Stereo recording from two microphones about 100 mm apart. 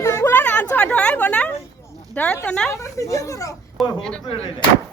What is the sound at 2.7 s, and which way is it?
Speech, 35° left (ahead or behind).